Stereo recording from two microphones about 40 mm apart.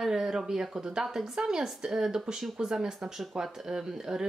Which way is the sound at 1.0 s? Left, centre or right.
Centre.